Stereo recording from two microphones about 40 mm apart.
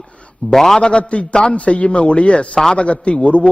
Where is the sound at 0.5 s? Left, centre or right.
Centre.